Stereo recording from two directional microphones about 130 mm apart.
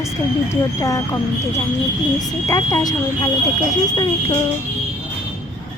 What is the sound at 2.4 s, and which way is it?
Speech, 30° left (ahead or behind).